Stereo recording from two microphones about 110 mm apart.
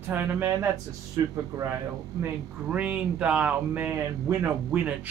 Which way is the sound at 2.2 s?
10° right (ahead or behind).